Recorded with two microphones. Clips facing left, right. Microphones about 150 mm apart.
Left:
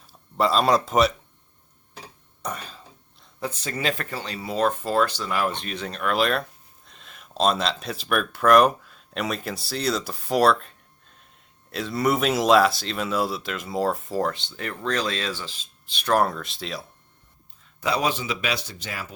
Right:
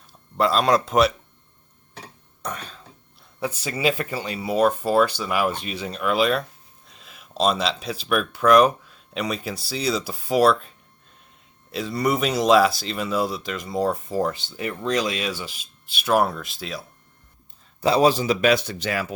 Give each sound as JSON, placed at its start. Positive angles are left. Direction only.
{"t": 0.3, "sound": "speech", "side_deg": 0}
{"t": 2.4, "sound": "cough", "side_deg": 5}
{"t": 3.4, "sound": "speech", "side_deg": -10}
{"t": 17.7, "sound": "speech", "side_deg": -30}